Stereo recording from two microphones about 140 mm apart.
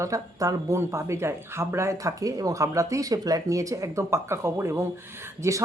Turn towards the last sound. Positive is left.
turn(degrees=-20)  # may be behind; listen again after turning